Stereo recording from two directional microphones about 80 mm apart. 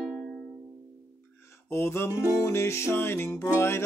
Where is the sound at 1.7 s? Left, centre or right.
Left.